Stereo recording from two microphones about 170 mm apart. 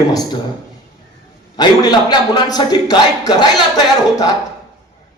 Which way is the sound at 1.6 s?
25° left (ahead or behind).